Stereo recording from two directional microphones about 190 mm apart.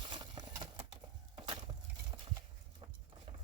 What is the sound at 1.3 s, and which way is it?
Wood, 30° right (ahead or behind).